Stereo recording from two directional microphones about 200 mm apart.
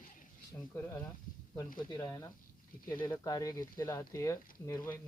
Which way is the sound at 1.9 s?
15° left (ahead or behind).